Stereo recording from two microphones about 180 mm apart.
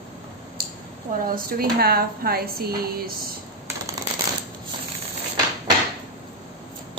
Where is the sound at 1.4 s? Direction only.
60° right (ahead or behind).